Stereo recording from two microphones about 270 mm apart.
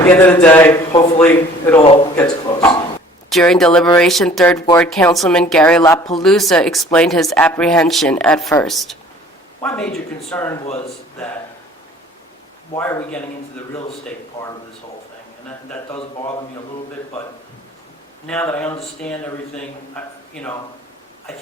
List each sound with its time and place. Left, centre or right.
0.0 s a man's voice: centre
4.9 s a man's voice: centre
12.7 s a man's voice: centre
16.0 s a man's voice: left
18.3 s speech: centre
20.3 s speech: centre